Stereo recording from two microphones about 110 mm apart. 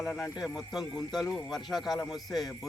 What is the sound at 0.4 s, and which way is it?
Speech, centre (ahead or behind).